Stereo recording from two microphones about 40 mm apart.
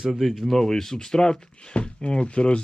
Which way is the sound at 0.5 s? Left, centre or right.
Centre.